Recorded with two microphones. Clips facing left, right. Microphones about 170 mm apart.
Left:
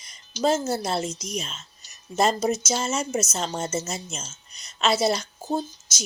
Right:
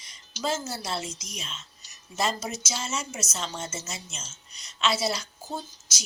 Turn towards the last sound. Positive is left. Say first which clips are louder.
# left 9 dB
turn(degrees=50)  # may be behind; listen again after turning